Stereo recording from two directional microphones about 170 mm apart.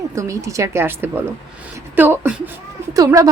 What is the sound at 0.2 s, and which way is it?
A woman's voice, 20° right (ahead or behind).